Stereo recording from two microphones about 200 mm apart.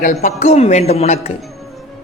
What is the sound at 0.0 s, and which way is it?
A man's voice, 35° left (ahead or behind).